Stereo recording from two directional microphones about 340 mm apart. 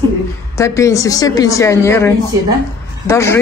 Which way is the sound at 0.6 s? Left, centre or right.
Centre.